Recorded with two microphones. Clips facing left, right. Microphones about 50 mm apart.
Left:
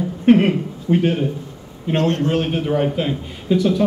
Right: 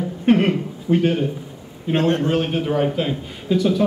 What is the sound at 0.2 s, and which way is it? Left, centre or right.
A man's voice, centre.